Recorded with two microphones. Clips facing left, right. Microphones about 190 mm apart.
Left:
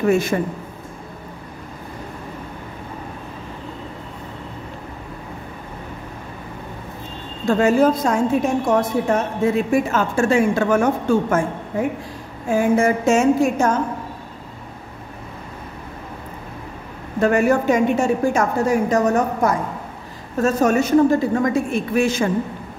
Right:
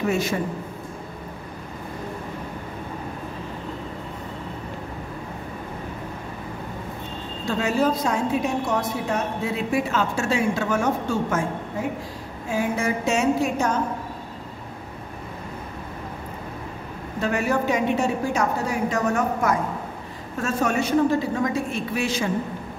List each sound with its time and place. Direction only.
0.1 s a woman's voice: 50° left (ahead or behind)
7.4 s a woman's voice: 50° left (ahead or behind)
12.4 s a woman's voice: 50° left (ahead or behind)
17.2 s a woman's voice: 50° left (ahead or behind)